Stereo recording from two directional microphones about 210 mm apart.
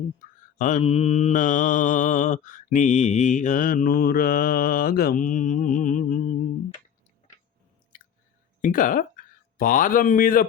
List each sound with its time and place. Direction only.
0.6 s mantra: 30° left (ahead or behind)
7.9 s chewing: 40° left (ahead or behind)
8.6 s speech: 40° left (ahead or behind)